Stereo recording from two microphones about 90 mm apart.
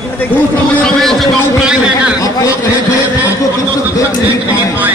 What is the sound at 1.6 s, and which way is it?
Speech, 10° right (ahead or behind).